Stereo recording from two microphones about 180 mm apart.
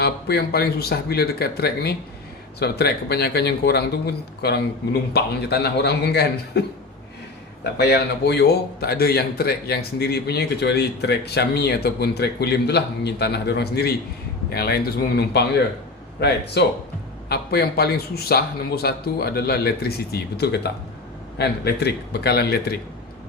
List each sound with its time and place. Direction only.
0.0 s a man's voice: 60° left (ahead or behind)
7.6 s a man's voice: 65° left (ahead or behind)